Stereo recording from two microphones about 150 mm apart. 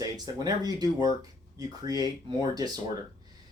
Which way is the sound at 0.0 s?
25° right (ahead or behind).